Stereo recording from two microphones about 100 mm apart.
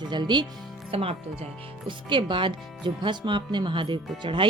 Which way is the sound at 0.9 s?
80° right.